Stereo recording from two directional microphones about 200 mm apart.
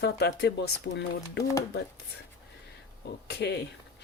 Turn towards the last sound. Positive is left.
turn(degrees=55)  # may be behind; listen again after turning